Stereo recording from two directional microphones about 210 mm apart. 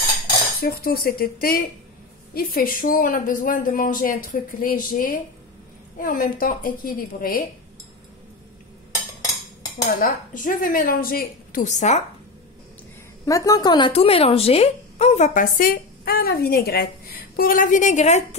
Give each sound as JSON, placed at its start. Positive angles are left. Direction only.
{"t": 0.6, "sound": "a woman's voice", "side_deg": 45}
{"t": 9.8, "sound": "a woman's voice", "side_deg": 40}
{"t": 13.2, "sound": "a woman's voice", "side_deg": 15}